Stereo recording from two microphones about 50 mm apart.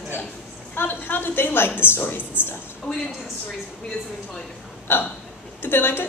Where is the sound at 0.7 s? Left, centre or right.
Left.